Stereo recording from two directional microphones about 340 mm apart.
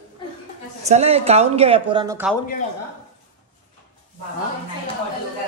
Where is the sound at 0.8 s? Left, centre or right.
Centre.